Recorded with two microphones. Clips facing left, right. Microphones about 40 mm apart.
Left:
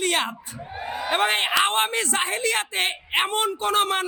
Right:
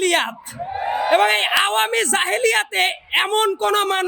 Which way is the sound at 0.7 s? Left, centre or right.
Centre.